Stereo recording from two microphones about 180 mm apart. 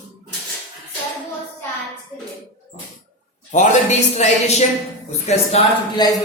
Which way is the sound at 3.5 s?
45° left (ahead or behind).